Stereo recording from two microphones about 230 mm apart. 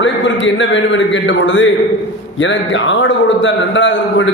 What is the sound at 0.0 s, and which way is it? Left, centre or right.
A man's voice, left.